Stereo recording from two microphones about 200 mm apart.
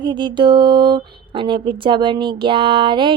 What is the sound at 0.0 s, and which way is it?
A woman's voice, 20° right (ahead or behind).